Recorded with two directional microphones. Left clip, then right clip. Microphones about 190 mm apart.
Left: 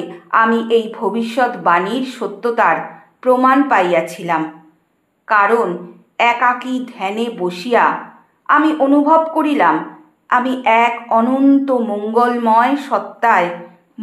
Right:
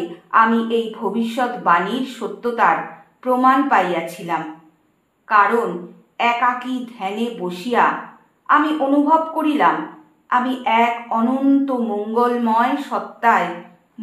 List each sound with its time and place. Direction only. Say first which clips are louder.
0.3 s a woman's voice: left 3 dB; 40° left (ahead or behind)
14.0 s music: left 5 dB; 40° left (ahead or behind)